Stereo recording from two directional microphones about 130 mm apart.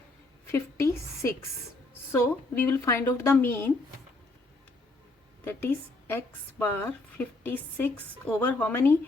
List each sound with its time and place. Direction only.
0.5 s a woman's voice: 20° left (ahead or behind)
5.5 s a woman's voice: 15° left (ahead or behind)